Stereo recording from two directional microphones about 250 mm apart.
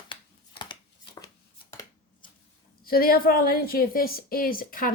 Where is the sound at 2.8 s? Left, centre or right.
Left.